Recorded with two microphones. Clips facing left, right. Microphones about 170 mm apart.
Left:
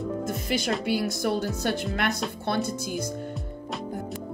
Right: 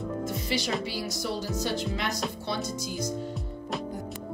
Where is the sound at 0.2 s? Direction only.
55° left (ahead or behind).